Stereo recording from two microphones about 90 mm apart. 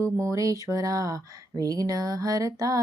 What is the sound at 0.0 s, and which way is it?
Music, 35° right (ahead or behind).